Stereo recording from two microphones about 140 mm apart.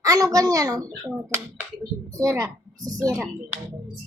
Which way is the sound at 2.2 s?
25° right (ahead or behind).